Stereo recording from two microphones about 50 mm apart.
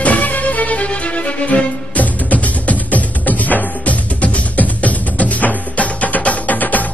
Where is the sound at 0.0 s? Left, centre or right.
Left.